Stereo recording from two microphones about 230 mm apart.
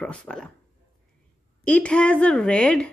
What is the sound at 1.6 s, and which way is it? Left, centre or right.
Speech, centre.